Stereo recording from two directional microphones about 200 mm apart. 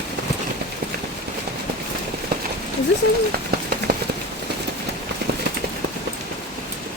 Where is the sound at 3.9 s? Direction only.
55° right (ahead or behind).